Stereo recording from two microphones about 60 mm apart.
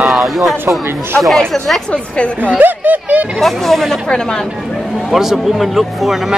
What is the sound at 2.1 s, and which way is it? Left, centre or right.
Speech, centre.